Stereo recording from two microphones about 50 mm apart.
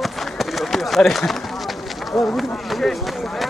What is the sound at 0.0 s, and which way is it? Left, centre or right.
Run, centre.